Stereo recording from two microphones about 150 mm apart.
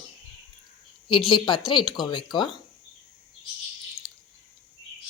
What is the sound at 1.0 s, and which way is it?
Speech, 35° left (ahead or behind).